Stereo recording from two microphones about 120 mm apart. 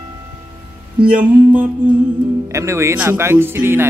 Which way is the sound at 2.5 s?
25° right (ahead or behind).